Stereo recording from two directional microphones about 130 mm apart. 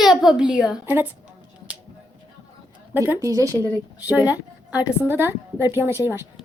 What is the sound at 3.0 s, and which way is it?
Speech, 15° right (ahead or behind).